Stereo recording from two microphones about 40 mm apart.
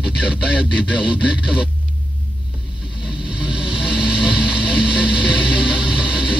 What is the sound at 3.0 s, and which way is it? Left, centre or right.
Vehicle, right.